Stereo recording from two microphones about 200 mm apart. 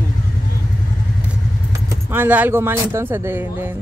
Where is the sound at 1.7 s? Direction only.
10° right (ahead or behind).